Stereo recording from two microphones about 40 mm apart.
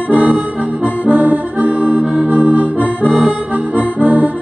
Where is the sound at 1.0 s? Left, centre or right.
Right.